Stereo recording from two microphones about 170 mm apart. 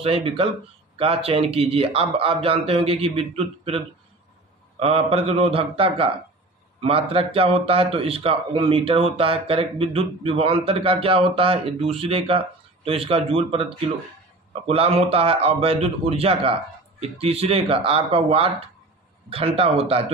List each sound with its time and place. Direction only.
0.0 s speech: 35° right (ahead or behind)